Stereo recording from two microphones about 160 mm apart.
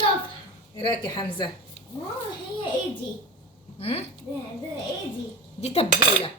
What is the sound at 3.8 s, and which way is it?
Speech, 40° left (ahead or behind).